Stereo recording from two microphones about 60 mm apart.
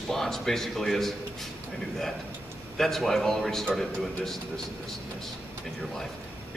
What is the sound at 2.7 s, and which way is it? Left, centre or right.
Speech, centre.